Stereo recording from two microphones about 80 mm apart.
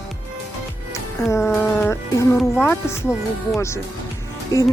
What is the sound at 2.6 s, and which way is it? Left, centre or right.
Speech, left.